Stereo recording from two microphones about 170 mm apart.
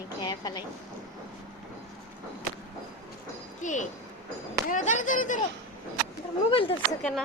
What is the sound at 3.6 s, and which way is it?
Speech, 45° left (ahead or behind).